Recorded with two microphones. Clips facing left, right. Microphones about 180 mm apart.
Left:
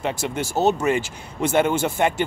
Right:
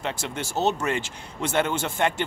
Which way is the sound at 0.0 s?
10° left (ahead or behind).